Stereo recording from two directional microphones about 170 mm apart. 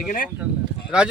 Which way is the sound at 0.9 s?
5° right (ahead or behind).